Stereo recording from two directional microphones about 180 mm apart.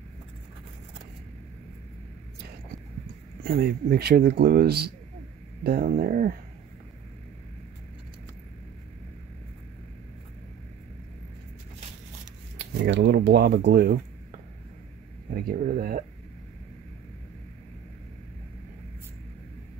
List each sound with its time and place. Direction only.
3.4 s speech: 60° right (ahead or behind)
12.7 s speech: 75° right (ahead or behind); by 13.9 s 60° right (ahead or behind)
15.3 s speech: 55° right (ahead or behind)